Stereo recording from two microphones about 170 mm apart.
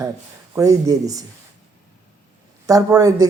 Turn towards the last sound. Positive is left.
turn(degrees=-20)  # may be behind; listen again after turning